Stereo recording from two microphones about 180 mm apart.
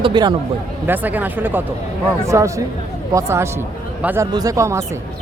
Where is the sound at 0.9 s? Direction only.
10° right (ahead or behind).